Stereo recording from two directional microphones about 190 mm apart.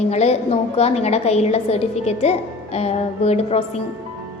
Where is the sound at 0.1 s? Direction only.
35° left (ahead or behind).